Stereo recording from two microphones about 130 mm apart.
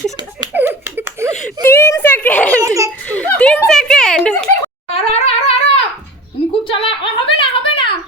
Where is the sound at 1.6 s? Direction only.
20° left (ahead or behind).